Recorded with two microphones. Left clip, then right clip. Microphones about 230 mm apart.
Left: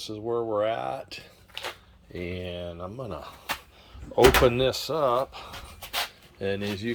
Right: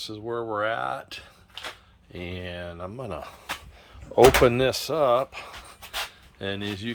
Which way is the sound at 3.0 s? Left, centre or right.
Centre.